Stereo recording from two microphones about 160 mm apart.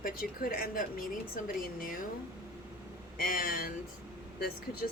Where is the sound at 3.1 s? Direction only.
60° left (ahead or behind).